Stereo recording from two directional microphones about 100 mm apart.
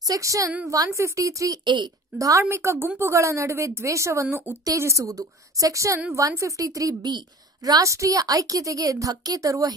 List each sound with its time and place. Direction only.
0.0 s a woman's voice: 35° right (ahead or behind)
1.6 s a woman's voice: 50° right (ahead or behind)
2.1 s a woman's voice: 35° right (ahead or behind)